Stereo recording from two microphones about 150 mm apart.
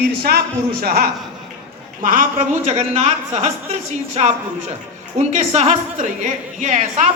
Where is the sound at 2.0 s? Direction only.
65° right (ahead or behind).